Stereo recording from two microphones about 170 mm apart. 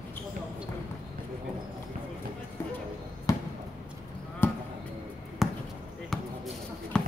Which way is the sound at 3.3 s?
20° left (ahead or behind).